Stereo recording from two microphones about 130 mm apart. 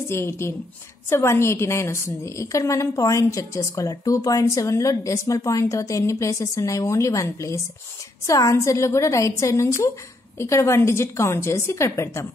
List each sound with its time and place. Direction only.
0.1 s a woman's voice: 20° left (ahead or behind)